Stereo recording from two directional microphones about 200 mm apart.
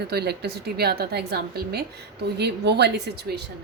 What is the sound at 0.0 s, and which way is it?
A woman's voice, 55° right (ahead or behind).